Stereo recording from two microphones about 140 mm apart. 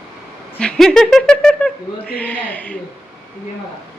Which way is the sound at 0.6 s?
5° left (ahead or behind).